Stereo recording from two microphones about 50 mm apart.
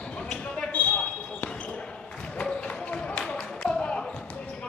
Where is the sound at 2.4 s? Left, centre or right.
Left.